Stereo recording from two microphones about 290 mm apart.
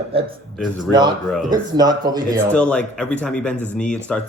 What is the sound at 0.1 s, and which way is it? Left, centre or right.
A man's voice, centre.